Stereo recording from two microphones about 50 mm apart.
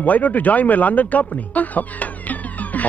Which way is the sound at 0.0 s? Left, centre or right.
Left.